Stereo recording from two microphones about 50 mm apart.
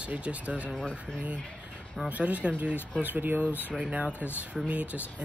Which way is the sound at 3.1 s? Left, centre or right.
Right.